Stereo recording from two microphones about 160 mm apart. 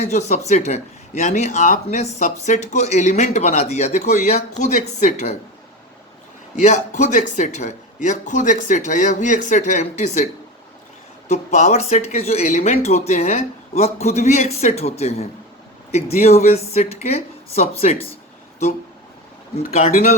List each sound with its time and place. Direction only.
0.0 s speech: 45° left (ahead or behind)
6.6 s speech: 50° left (ahead or behind)
11.3 s speech: 45° left (ahead or behind)
19.8 s speech: 45° left (ahead or behind)